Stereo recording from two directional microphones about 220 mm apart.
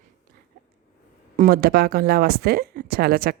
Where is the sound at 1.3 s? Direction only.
40° right (ahead or behind).